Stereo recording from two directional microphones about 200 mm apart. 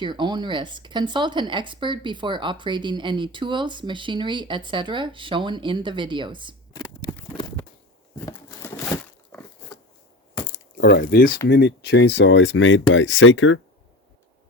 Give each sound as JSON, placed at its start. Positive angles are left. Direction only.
{"t": 0.0, "sound": "speech", "side_deg": -25}
{"t": 6.7, "sound": "scissors", "side_deg": 20}
{"t": 8.2, "sound": "a sound", "side_deg": 15}
{"t": 10.8, "sound": "speech", "side_deg": 50}